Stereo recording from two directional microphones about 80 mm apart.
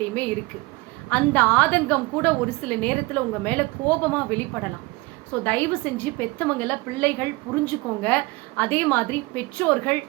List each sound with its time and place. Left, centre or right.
0.0 s a woman's voice: centre